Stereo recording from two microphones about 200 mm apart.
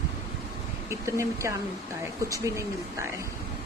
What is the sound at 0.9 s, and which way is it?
Speech, 15° right (ahead or behind).